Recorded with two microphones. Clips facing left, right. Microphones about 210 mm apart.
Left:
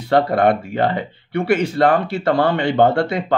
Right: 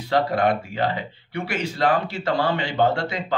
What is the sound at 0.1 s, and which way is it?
Speech, 55° left (ahead or behind).